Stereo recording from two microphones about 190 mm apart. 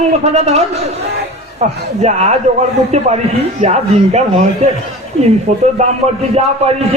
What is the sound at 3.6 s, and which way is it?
Speech, 35° right (ahead or behind).